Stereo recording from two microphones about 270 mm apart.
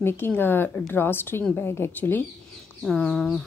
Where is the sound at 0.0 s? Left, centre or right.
Centre.